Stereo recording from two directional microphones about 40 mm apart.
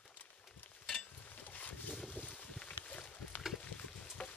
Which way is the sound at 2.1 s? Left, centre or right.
Left.